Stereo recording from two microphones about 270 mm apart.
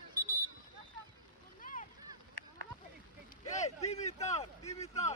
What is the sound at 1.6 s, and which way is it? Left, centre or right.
Boat, left.